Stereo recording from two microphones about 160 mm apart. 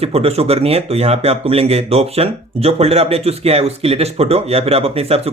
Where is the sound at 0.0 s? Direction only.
40° right (ahead or behind).